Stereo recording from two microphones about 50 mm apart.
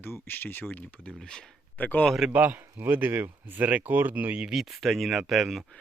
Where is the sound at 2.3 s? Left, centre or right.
Right.